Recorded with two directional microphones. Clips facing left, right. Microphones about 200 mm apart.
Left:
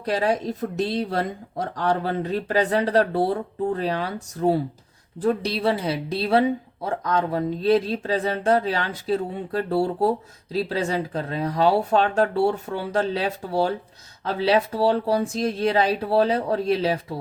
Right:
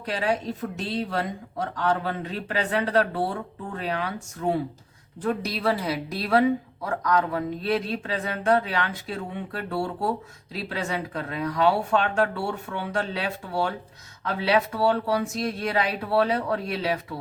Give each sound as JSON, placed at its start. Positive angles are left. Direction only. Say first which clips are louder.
{"t": 0.0, "sound": "a woman's voice", "louder": "left 4 dB", "side_deg": 40}